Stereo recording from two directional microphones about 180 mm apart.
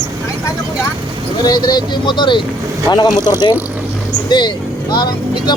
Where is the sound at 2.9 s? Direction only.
20° left (ahead or behind).